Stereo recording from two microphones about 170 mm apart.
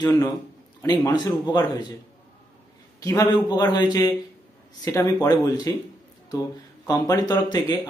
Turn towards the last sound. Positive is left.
turn(degrees=25)  # may be behind; listen again after turning